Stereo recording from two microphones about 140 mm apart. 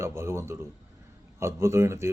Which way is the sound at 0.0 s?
20° right (ahead or behind).